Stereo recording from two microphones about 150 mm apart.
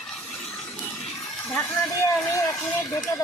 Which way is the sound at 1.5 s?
15° left (ahead or behind).